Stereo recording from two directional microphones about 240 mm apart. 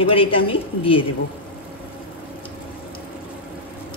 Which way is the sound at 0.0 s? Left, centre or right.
Left.